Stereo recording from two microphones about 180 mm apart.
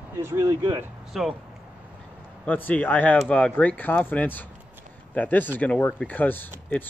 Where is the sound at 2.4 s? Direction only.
10° left (ahead or behind).